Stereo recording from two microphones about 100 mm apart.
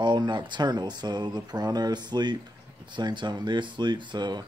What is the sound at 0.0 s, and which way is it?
Speech, 50° right (ahead or behind).